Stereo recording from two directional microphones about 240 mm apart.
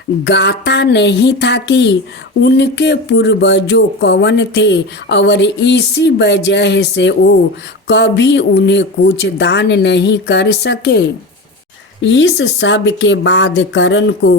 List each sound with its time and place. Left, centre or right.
0.3 s speech: left